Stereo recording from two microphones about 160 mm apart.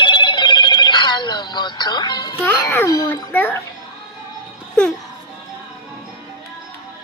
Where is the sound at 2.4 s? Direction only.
15° left (ahead or behind).